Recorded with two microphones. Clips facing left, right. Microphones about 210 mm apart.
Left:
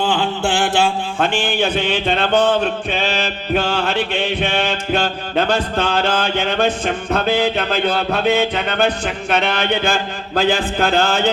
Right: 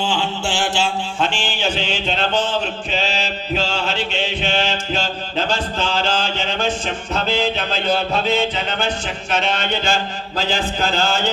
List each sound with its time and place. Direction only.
0.0 s mantra: 55° left (ahead or behind)